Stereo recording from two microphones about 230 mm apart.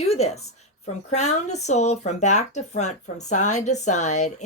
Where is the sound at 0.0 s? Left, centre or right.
Left.